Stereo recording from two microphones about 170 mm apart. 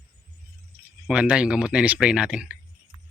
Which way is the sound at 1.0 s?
5° right (ahead or behind).